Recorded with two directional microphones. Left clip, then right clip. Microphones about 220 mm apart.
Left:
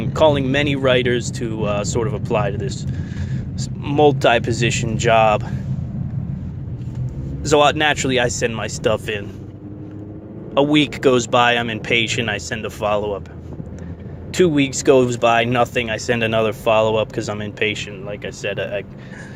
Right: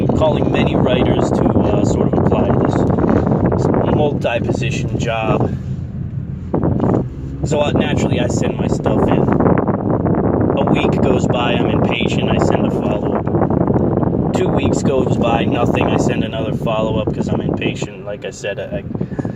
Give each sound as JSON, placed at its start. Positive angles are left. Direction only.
{"t": 0.1, "sound": "speech", "side_deg": 45}
{"t": 7.5, "sound": "speech", "side_deg": 45}
{"t": 10.5, "sound": "speech", "side_deg": 45}
{"t": 14.3, "sound": "speech", "side_deg": 45}